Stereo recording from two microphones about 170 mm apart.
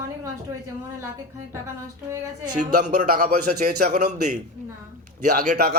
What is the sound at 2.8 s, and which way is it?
A man's voice, 50° right (ahead or behind).